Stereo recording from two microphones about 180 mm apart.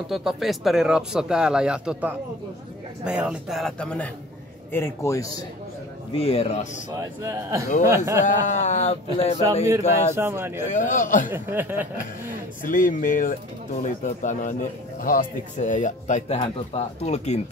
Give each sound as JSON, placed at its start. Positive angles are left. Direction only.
{"t": 0.1, "sound": "a man's voice", "side_deg": 0}
{"t": 6.1, "sound": "speech", "side_deg": 35}
{"t": 7.0, "sound": "speech", "side_deg": -15}
{"t": 8.5, "sound": "speech", "side_deg": 40}
{"t": 10.1, "sound": "speech", "side_deg": -15}
{"t": 10.7, "sound": "speech", "side_deg": 45}
{"t": 11.2, "sound": "speech", "side_deg": -10}
{"t": 12.6, "sound": "speech", "side_deg": 50}